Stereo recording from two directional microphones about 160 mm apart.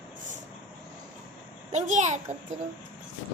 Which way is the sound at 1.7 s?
50° right (ahead or behind).